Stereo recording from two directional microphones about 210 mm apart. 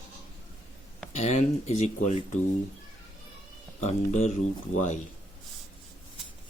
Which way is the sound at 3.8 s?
35° left (ahead or behind).